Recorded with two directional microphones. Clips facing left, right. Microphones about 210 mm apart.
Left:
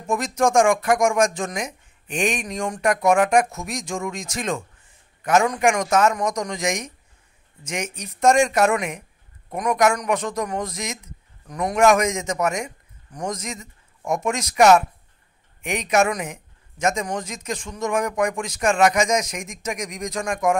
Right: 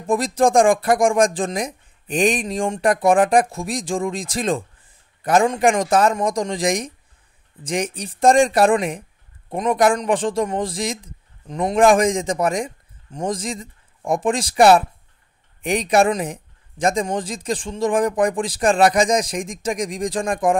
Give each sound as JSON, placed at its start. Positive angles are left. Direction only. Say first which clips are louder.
{"t": 0.0, "sound": "a man's voice", "louder": "right 4 dB", "side_deg": -30}